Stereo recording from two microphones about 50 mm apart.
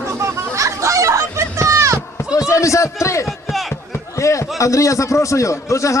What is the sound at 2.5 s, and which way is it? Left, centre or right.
Speech, left.